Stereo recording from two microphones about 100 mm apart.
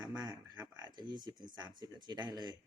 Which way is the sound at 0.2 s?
45° right (ahead or behind).